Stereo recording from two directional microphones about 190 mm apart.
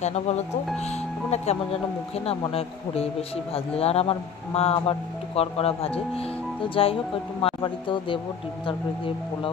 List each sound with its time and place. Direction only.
0.0 s speech: 35° left (ahead or behind)